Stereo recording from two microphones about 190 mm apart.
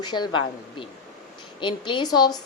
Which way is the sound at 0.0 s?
20° left (ahead or behind).